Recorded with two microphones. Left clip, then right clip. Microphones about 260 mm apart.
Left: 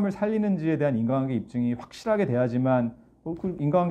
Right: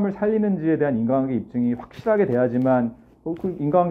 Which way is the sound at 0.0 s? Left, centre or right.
Left.